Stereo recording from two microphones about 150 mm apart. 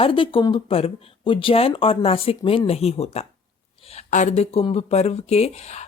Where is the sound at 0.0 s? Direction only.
35° left (ahead or behind).